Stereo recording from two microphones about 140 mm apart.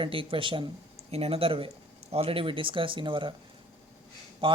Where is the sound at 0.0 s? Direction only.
40° right (ahead or behind).